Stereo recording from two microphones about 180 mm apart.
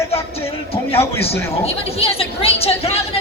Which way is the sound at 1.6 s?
30° left (ahead or behind).